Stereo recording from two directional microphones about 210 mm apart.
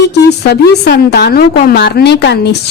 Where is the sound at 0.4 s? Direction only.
50° left (ahead or behind).